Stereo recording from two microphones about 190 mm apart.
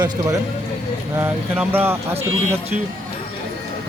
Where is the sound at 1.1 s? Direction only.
10° right (ahead or behind).